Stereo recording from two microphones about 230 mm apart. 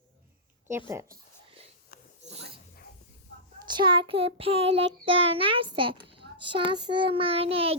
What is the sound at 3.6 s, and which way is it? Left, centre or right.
Child singing, centre.